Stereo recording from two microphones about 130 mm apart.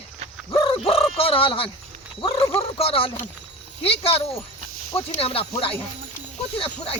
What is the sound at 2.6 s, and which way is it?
Speech, 50° left (ahead or behind).